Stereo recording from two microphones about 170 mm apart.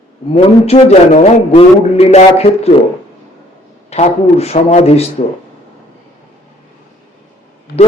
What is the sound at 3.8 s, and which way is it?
Speech, 40° left (ahead or behind).